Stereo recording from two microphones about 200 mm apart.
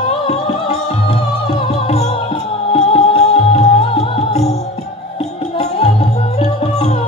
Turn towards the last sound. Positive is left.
turn(degrees=30)  # may be behind; listen again after turning